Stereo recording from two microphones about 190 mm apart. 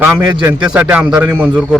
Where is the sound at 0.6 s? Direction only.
5° right (ahead or behind).